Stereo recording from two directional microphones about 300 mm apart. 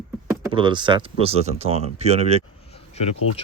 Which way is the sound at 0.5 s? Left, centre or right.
Centre.